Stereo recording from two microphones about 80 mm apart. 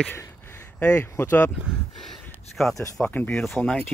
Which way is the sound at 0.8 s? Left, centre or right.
Centre.